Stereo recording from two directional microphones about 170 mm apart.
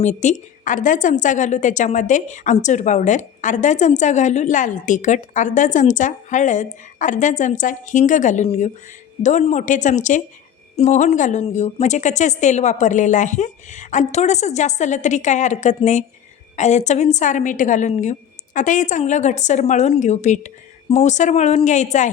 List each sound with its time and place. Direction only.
0.0 s a woman's voice: 45° left (ahead or behind)